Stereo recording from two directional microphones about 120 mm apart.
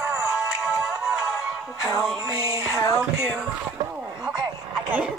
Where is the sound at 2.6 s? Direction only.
25° left (ahead or behind).